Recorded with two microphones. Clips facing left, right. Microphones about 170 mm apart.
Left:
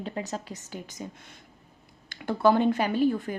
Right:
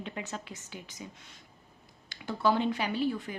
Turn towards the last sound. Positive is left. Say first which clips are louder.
# left 6 dB
turn(degrees=50)  # may be behind; listen again after turning